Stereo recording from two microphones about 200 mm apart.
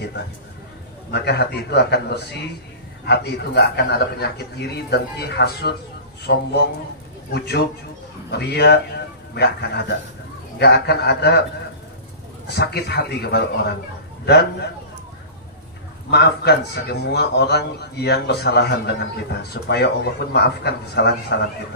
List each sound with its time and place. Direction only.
1.1 s a man's voice: 55° left (ahead or behind)
12.5 s a man's voice: 55° left (ahead or behind)
16.1 s a man's voice: 55° left (ahead or behind)